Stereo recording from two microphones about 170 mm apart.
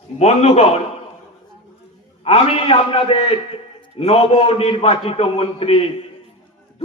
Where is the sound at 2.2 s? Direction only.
35° left (ahead or behind).